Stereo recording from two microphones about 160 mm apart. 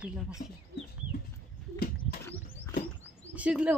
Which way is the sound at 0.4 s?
65° left (ahead or behind).